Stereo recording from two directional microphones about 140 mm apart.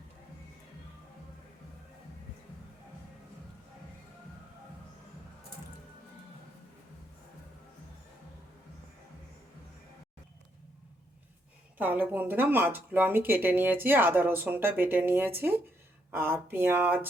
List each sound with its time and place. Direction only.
11.8 s speech: 10° right (ahead or behind)